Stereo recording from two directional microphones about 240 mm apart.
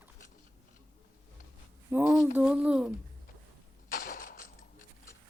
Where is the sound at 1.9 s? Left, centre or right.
Centre.